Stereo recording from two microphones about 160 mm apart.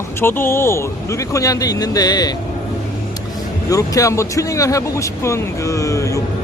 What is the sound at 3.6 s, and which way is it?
Speech, 20° left (ahead or behind).